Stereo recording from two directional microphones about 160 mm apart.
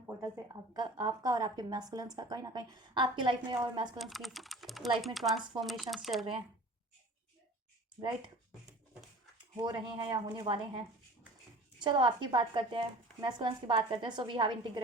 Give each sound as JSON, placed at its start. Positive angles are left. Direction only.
{"t": 0.2, "sound": "a woman's voice", "side_deg": -25}
{"t": 3.9, "sound": "speech", "side_deg": 0}
{"t": 9.6, "sound": "a woman's voice", "side_deg": -30}